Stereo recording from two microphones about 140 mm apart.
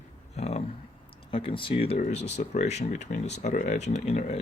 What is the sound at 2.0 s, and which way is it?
Speech, 55° left (ahead or behind).